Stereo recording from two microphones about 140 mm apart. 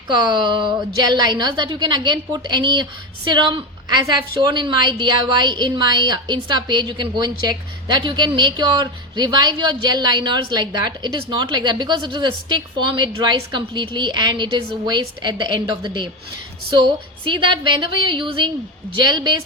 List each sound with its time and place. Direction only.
0.1 s a woman's voice: 30° right (ahead or behind)
17.2 s a woman's voice: 35° right (ahead or behind)